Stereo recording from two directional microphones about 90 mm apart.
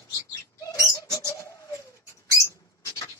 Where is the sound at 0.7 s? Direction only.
40° left (ahead or behind).